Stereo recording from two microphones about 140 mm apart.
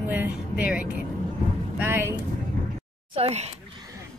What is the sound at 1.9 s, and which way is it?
Speech, 15° right (ahead or behind).